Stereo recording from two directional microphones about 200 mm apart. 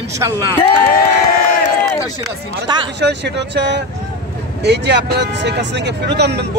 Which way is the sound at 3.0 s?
60° right (ahead or behind).